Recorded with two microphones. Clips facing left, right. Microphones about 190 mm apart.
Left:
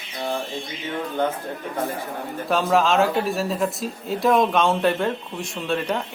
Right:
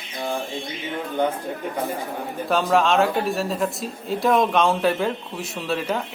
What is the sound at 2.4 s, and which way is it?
Speech, centre (ahead or behind).